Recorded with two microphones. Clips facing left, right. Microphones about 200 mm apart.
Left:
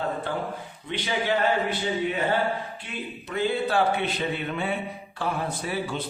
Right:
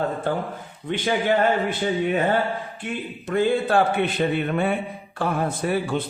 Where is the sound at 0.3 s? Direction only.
45° right (ahead or behind).